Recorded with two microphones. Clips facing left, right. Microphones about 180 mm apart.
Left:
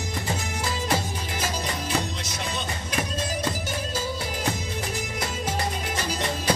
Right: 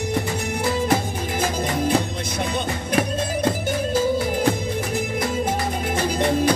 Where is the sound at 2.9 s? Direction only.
55° right (ahead or behind).